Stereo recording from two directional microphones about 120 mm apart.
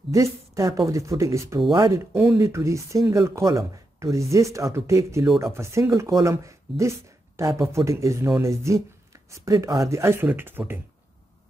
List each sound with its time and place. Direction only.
0.1 s speech: 25° right (ahead or behind)